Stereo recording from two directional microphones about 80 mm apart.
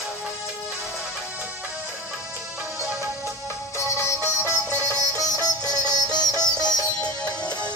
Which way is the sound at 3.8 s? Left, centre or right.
Left.